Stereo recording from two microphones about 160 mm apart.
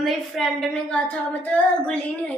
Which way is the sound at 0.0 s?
Centre (ahead or behind).